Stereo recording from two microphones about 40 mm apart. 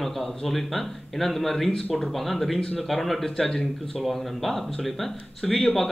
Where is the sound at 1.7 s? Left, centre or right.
Left.